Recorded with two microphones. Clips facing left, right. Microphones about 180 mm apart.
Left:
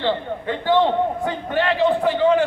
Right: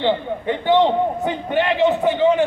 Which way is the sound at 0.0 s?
20° right (ahead or behind).